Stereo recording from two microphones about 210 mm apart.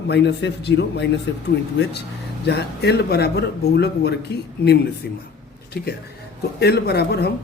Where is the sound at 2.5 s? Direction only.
50° left (ahead or behind).